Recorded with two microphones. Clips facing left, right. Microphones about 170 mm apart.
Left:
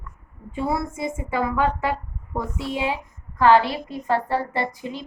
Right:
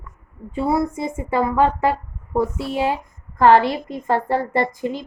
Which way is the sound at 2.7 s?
45° right (ahead or behind).